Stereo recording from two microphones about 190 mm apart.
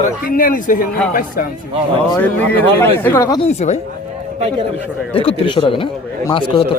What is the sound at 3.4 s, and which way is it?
Speech, 35° left (ahead or behind).